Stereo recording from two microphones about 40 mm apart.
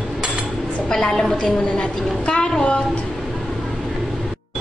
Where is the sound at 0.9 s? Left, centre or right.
Centre.